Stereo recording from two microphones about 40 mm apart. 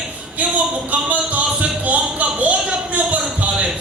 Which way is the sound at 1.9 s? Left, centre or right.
Right.